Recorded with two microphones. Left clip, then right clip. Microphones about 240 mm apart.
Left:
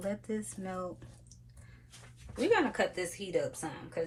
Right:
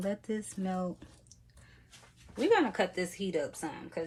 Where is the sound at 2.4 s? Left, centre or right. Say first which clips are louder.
Right 1 dB; right.